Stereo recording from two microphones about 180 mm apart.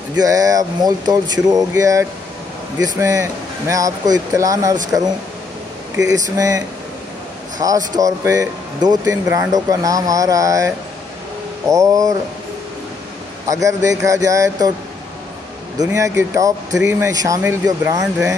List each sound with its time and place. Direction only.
0.2 s speech: 20° right (ahead or behind)
6.3 s speech: 20° right (ahead or behind)
7.6 s speech: 20° right (ahead or behind)
11.7 s speech: 20° right (ahead or behind)
13.5 s speech: 20° right (ahead or behind)
15.8 s speech: 15° right (ahead or behind)